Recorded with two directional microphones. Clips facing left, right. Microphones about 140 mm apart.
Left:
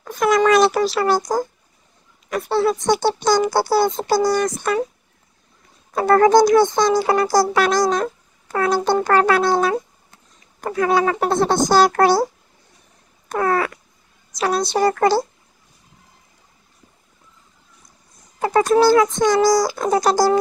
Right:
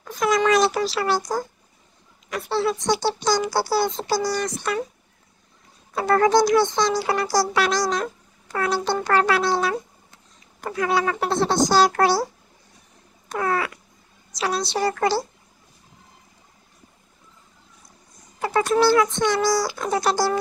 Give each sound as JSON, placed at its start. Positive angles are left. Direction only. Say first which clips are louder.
{"t": 0.0, "sound": "a child's voice", "louder": "left 4 dB", "side_deg": 55}
{"t": 5.9, "sound": "speech", "louder": "left 5 dB", "side_deg": 45}
{"t": 13.3, "sound": "speech", "louder": "left 5 dB", "side_deg": 50}
{"t": 18.4, "sound": "a child's voice", "louder": "left 4 dB", "side_deg": 40}